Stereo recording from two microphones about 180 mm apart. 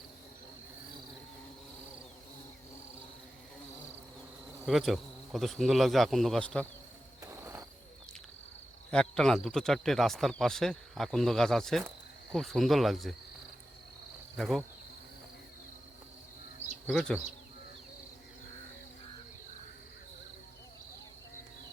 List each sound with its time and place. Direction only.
4.6 s speech: centre (ahead or behind)
7.3 s hoot: 15° right (ahead or behind)
8.9 s speech: 5° left (ahead or behind)
14.3 s speech: centre (ahead or behind)
16.9 s speech: 5° left (ahead or behind)